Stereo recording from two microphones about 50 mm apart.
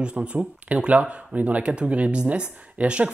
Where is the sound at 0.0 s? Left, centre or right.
Right.